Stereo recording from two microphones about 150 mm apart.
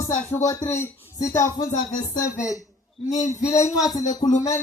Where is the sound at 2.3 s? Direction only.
20° left (ahead or behind).